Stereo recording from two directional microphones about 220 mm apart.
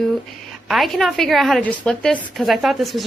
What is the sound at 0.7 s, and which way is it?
A woman's voice, centre (ahead or behind).